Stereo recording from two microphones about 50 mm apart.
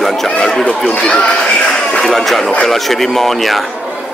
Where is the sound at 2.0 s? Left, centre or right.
Centre.